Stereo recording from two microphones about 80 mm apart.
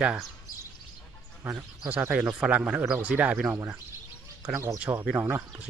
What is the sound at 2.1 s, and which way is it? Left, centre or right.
Speech, centre.